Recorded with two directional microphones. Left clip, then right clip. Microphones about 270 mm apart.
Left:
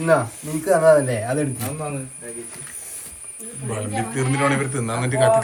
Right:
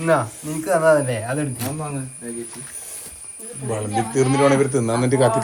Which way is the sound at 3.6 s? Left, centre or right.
Centre.